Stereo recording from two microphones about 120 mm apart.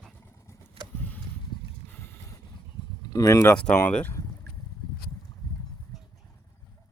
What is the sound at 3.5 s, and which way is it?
Speech, 10° left (ahead or behind).